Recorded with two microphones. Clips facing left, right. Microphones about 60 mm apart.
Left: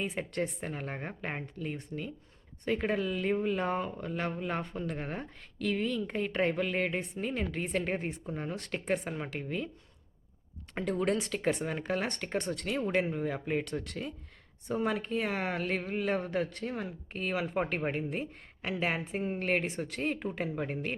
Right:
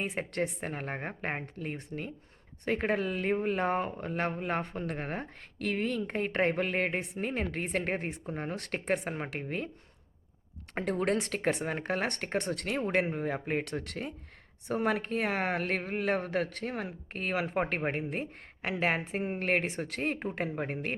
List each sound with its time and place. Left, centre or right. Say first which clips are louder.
0.0 s speech: right 1 dB; right
9.0 s speech: right 1 dB; right
10.8 s speech: right 1 dB; right